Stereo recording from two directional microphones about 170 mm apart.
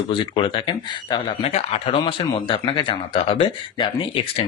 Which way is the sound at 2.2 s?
25° left (ahead or behind).